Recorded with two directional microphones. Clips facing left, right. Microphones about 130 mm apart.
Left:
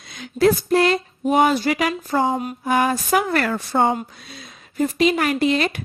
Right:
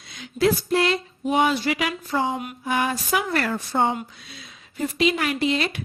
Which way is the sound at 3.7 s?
45° left (ahead or behind).